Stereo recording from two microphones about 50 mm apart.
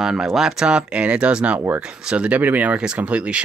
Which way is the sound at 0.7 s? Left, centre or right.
Right.